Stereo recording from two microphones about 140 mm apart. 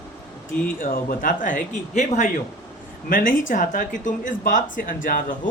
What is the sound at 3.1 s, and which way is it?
Speech, 80° left.